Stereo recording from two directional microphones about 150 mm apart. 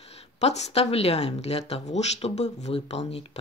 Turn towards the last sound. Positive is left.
turn(degrees=45)  # may be behind; listen again after turning